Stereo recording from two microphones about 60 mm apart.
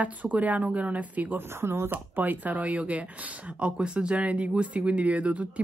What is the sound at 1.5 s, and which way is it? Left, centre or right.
Speech, right.